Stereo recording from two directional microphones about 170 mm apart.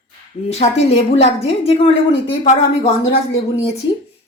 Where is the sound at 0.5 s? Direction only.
40° left (ahead or behind).